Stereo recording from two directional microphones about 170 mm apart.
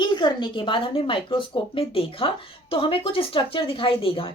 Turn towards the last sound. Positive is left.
turn(degrees=35)  # may be behind; listen again after turning